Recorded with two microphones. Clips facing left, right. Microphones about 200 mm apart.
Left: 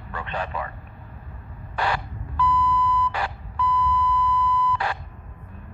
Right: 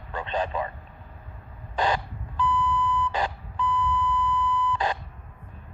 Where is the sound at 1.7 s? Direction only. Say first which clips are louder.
Right 1 dB; 20° right (ahead or behind).